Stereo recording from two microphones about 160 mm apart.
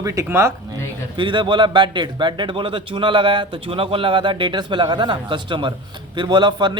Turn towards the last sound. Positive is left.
turn(degrees=-25)  # may be behind; listen again after turning